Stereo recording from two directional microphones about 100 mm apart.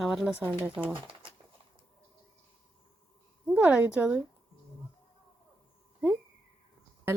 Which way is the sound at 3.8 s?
15° right (ahead or behind).